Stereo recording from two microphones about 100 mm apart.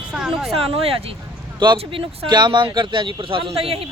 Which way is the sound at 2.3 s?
50° right (ahead or behind).